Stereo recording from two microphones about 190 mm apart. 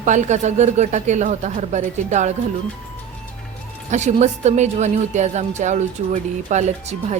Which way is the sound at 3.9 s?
40° right (ahead or behind).